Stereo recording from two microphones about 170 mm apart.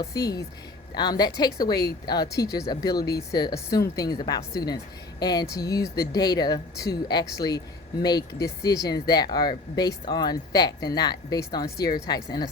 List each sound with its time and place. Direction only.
0.0 s speech: 20° left (ahead or behind)